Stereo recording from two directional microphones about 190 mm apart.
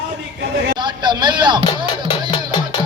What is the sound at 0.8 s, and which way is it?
Speech, 25° right (ahead or behind).